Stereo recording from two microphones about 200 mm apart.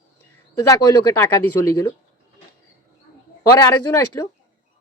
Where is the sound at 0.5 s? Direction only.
15° left (ahead or behind).